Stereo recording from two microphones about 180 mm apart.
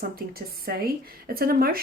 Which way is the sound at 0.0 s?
55° right (ahead or behind).